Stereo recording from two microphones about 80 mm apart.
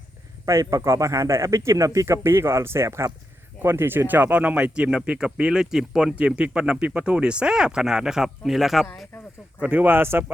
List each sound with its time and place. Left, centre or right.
0.4 s a man's voice: right; by 8.9 s centre
9.6 s speech: right